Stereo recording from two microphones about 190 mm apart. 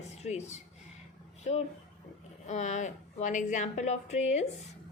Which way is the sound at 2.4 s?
40° left (ahead or behind).